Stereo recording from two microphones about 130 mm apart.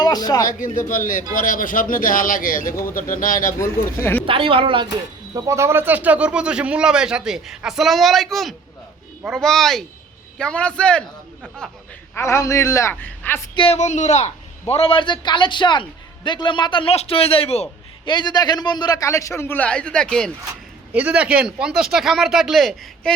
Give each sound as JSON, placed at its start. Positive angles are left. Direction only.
{"t": 0.0, "sound": "speech", "side_deg": 30}
{"t": 0.4, "sound": "speech", "side_deg": 90}
{"t": 4.3, "sound": "a woman's voice", "side_deg": -45}
{"t": 4.9, "sound": "a man's voice", "side_deg": -25}
{"t": 12.1, "sound": "a man's voice", "side_deg": 20}
{"t": 13.7, "sound": "speech", "side_deg": 65}
{"t": 14.7, "sound": "a man's voice", "side_deg": 45}
{"t": 18.1, "sound": "a man's voice", "side_deg": 35}
{"t": 20.9, "sound": "speech", "side_deg": -10}